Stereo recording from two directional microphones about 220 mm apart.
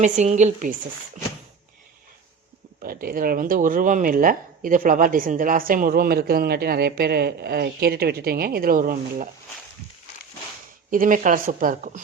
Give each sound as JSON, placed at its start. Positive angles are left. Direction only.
{"t": 0.0, "sound": "speech", "side_deg": -30}
{"t": 2.8, "sound": "speech", "side_deg": -40}
{"t": 10.9, "sound": "speech", "side_deg": -40}